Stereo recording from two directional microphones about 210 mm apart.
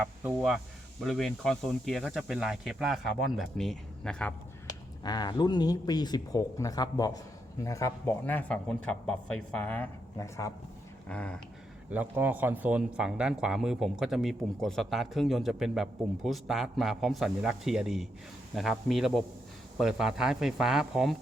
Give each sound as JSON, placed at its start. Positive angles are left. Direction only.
{"t": 0.0, "sound": "speech", "side_deg": -10}
{"t": 4.6, "sound": "a man's voice", "side_deg": 20}
{"t": 11.9, "sound": "speech", "side_deg": -10}